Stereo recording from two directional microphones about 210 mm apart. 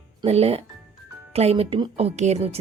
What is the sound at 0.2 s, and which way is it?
Speech, 30° right (ahead or behind).